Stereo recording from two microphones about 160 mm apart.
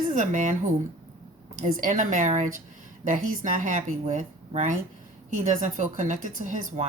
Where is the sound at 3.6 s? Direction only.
50° right (ahead or behind).